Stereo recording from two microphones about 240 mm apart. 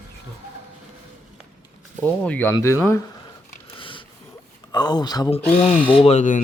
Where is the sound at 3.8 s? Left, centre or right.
Left.